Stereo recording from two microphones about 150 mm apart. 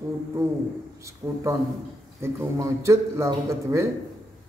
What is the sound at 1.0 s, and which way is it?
A man's voice, 20° right (ahead or behind).